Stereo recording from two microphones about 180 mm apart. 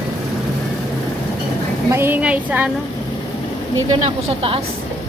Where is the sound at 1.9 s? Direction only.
15° right (ahead or behind).